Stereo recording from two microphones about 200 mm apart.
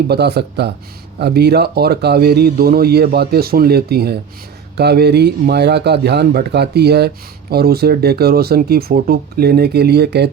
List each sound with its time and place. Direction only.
0.1 s a man's voice: 55° right (ahead or behind)